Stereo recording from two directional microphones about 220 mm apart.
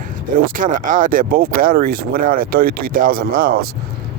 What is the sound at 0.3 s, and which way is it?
Speech, 40° right (ahead or behind).